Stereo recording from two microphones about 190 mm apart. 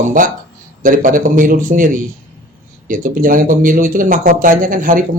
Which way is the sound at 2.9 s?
45° right (ahead or behind).